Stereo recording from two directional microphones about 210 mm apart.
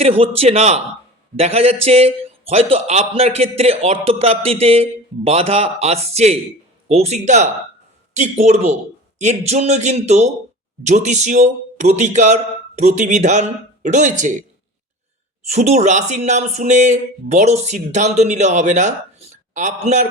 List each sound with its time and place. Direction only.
0.0 s a man's voice: 30° right (ahead or behind)
15.4 s speech: 30° right (ahead or behind)